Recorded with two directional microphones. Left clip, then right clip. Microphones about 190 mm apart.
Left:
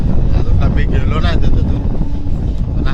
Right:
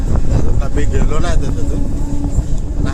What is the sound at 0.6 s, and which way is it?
Speech, 15° right (ahead or behind).